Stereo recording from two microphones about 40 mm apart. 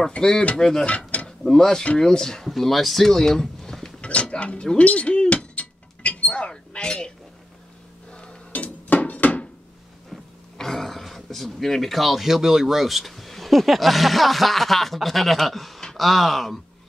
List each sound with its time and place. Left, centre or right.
0.2 s speech: centre
0.8 s mechanisms: left
1.5 s speech: centre
3.1 s a sound: centre
4.0 s dishes: left
4.6 s speech: left
5.3 s a sound: left
8.1 s dishes: left
8.5 s a sound: left
10.0 s speech: centre